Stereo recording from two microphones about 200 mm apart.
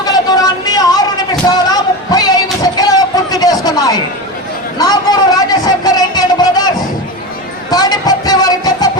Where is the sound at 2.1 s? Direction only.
20° left (ahead or behind).